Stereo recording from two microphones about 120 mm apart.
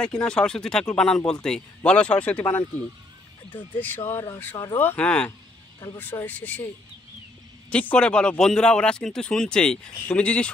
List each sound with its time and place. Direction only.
0.0 s speech: 10° left (ahead or behind)
7.7 s speech: 10° left (ahead or behind)